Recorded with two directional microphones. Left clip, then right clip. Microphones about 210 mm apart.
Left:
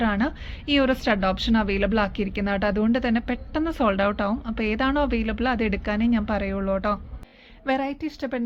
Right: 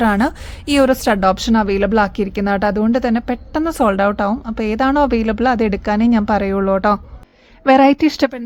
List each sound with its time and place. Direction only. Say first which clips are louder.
0.0 s a woman's voice: right 9 dB; 50° right (ahead or behind)
7.6 s a woman's voice: right 15 dB; 65° right (ahead or behind)